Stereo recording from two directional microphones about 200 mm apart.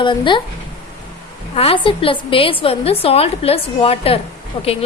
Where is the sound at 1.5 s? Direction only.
30° left (ahead or behind).